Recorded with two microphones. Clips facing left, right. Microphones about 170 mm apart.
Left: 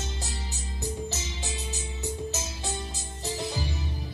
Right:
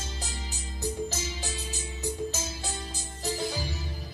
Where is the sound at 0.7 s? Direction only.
20° left (ahead or behind).